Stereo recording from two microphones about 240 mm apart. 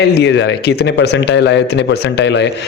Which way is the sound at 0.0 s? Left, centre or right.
Left.